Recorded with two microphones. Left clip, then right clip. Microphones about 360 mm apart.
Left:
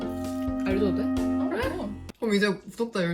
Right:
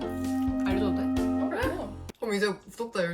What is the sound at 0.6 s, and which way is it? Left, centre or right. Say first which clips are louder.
Speech: left 5 dB; centre.